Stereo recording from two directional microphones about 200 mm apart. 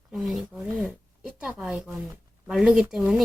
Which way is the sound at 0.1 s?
Centre (ahead or behind).